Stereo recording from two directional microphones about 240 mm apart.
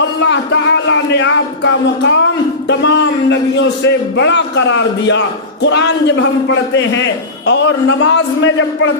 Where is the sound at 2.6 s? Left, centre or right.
Left.